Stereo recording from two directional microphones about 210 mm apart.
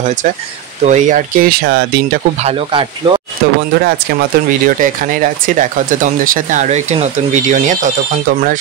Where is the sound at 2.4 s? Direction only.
25° right (ahead or behind).